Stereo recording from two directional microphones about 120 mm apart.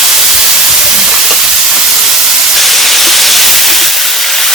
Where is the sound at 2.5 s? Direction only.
Centre (ahead or behind).